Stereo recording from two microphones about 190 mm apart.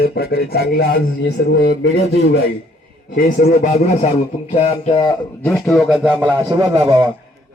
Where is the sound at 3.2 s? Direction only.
45° left (ahead or behind).